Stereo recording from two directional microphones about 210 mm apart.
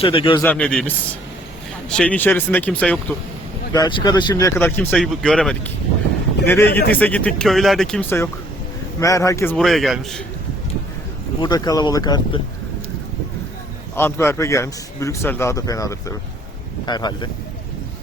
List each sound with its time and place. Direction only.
0.0 s speech: 25° left (ahead or behind)
0.4 s a man's voice: 5° left (ahead or behind)
3.7 s a man's voice: 20° left (ahead or behind); by 10.2 s centre (ahead or behind)
11.3 s speech: 20° left (ahead or behind)
13.9 s a man's voice: 10° left (ahead or behind)